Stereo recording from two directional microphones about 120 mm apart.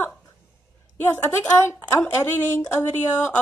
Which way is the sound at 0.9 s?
20° left (ahead or behind).